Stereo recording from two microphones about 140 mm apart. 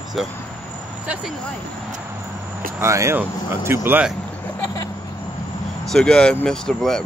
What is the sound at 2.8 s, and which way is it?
Speech, 20° right (ahead or behind).